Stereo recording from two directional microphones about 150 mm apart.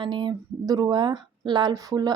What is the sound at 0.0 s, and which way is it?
Speech, 30° right (ahead or behind).